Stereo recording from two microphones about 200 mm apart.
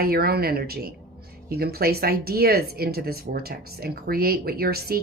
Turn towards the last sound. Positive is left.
turn(degrees=-50)  # may be behind; listen again after turning